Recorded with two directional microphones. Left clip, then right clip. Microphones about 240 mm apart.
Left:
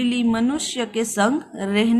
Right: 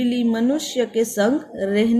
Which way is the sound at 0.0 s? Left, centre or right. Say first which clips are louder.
Right 1 dB; left.